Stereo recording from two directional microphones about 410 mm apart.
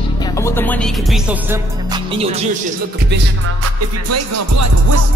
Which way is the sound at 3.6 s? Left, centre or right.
Right.